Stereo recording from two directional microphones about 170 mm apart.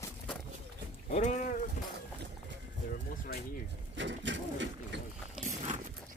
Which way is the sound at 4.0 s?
90° right.